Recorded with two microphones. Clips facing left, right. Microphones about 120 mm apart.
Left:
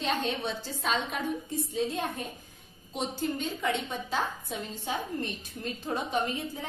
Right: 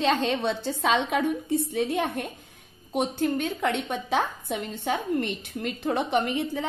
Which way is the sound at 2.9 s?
55° right (ahead or behind).